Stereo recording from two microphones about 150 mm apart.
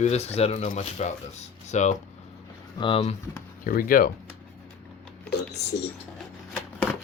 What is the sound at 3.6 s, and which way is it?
Speech, 70° left (ahead or behind).